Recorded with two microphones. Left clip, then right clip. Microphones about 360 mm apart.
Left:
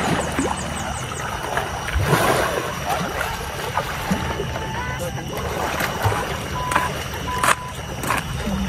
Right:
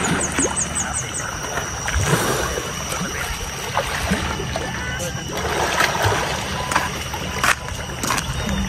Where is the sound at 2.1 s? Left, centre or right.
Left.